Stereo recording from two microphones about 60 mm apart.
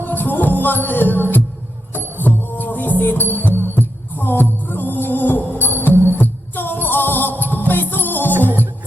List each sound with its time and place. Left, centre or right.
0.0 s music: left